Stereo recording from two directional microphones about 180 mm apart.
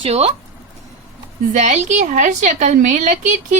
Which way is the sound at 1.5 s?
40° right (ahead or behind).